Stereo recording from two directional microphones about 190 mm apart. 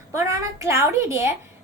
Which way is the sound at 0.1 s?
15° right (ahead or behind).